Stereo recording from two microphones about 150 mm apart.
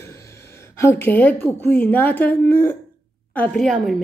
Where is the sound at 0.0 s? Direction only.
20° left (ahead or behind).